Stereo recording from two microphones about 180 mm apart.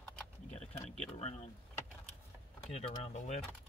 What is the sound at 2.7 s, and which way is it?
Speech, 35° left (ahead or behind).